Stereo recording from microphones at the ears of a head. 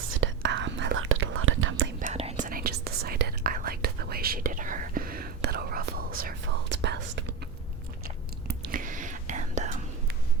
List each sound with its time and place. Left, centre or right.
0.0 s whispering: right
8.4 s whispering: right